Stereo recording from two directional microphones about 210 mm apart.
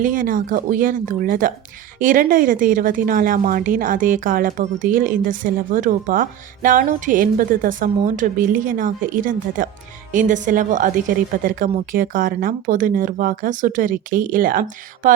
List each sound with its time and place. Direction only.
0.0 s a woman's voice: 40° right (ahead or behind)